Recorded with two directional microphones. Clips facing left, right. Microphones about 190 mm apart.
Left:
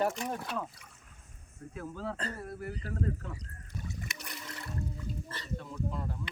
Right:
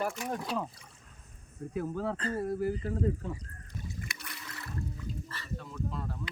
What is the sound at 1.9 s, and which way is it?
Speech, 40° right (ahead or behind).